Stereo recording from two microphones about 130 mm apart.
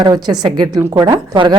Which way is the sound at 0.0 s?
35° right (ahead or behind).